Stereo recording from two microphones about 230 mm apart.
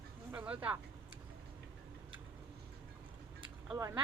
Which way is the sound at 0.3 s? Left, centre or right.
Centre.